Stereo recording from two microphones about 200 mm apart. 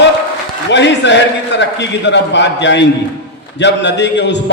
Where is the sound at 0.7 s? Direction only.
60° left (ahead or behind).